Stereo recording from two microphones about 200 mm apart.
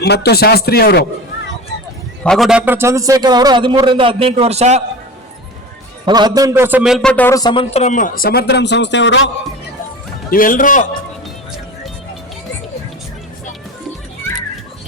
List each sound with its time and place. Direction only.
0.0 s speech: 55° left (ahead or behind)
1.7 s a sound: 60° left (ahead or behind)
2.2 s a man's voice: centre (ahead or behind); by 4.8 s 35° right (ahead or behind)
6.1 s a man's voice: 20° right (ahead or behind); by 9.3 s 65° left (ahead or behind)
10.3 s a man's voice: 45° left (ahead or behind)